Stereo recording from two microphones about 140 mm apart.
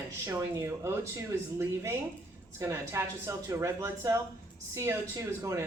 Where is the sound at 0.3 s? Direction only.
20° right (ahead or behind).